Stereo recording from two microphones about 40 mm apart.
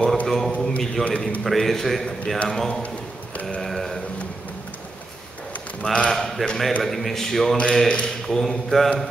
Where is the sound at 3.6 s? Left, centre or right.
Centre.